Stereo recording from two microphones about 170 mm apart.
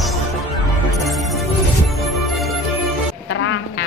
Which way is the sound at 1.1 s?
Centre (ahead or behind).